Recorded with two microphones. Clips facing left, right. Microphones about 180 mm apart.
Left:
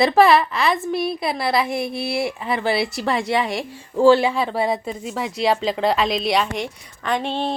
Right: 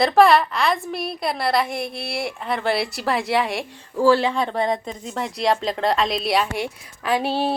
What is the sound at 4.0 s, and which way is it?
Speech, 25° left (ahead or behind).